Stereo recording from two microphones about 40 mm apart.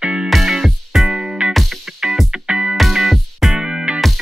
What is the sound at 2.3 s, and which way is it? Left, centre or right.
Music, right.